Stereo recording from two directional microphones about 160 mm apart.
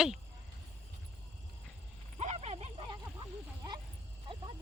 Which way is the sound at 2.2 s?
45° right (ahead or behind).